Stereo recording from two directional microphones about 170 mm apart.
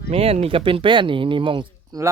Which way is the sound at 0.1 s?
35° right (ahead or behind).